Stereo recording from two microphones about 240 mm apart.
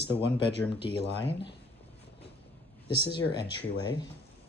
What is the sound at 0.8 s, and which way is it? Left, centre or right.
Speech, left.